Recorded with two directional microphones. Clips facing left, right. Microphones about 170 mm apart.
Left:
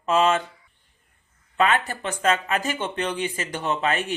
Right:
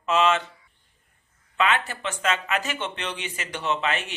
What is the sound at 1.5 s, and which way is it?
Speech, 40° left (ahead or behind).